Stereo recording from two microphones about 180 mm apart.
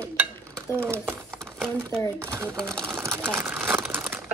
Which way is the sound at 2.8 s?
15° right (ahead or behind).